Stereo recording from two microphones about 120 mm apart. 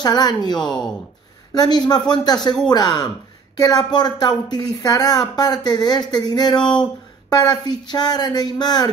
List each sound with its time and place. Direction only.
0.0 s speech: 35° left (ahead or behind)